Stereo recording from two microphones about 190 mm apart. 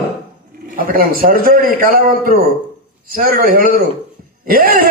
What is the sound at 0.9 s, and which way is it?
A man's voice, 50° right (ahead or behind).